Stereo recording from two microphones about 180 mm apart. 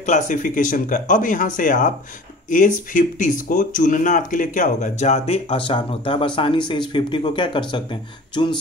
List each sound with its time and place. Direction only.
0.0 s speech: 45° left (ahead or behind); by 8.5 s 25° left (ahead or behind)